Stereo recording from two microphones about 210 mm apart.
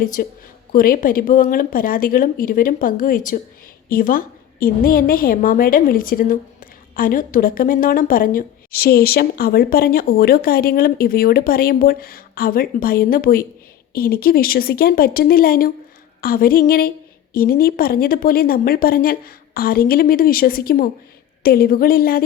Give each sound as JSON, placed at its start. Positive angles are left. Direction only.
{"t": 0.0, "sound": "a woman's voice", "side_deg": 40}